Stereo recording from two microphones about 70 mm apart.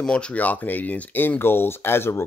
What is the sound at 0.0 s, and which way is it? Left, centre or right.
Speech, centre.